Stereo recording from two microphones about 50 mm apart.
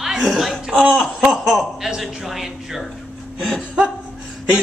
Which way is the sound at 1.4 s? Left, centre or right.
Centre.